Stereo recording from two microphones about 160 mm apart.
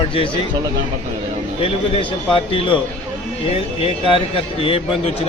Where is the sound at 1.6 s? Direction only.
35° left (ahead or behind).